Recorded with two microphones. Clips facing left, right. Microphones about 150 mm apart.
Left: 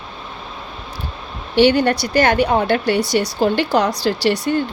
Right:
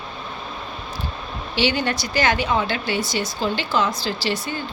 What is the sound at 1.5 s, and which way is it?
Speech, 55° left (ahead or behind).